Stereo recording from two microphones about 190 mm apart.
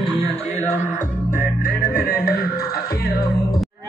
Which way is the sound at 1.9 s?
50° left (ahead or behind).